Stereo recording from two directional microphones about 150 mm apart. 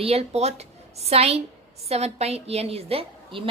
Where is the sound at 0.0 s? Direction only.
40° right (ahead or behind).